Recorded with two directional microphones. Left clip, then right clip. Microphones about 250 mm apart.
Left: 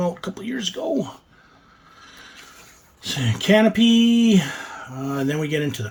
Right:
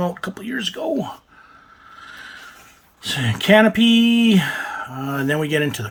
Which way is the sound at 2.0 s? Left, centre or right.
Centre.